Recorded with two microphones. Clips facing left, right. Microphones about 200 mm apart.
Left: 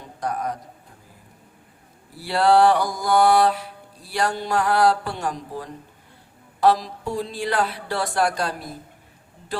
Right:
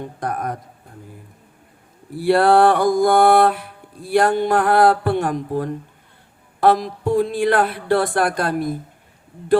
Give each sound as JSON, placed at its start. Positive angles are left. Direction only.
{"t": 0.0, "sound": "mantra", "side_deg": -55}
{"t": 2.1, "sound": "mantra", "side_deg": -55}
{"t": 6.6, "sound": "speech", "side_deg": -55}